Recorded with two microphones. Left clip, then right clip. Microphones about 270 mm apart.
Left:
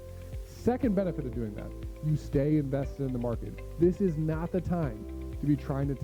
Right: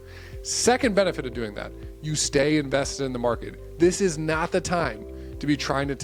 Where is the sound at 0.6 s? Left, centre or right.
Centre.